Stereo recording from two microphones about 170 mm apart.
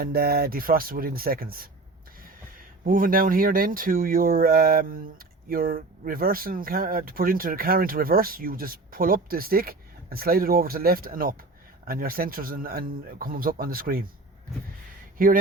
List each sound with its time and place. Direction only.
0.0 s speech: 65° right (ahead or behind)